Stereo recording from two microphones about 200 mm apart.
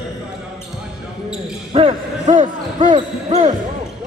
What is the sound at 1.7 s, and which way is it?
Basketball bounce, 35° right (ahead or behind).